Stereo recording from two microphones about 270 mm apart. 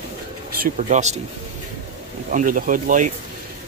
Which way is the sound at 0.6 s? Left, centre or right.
Right.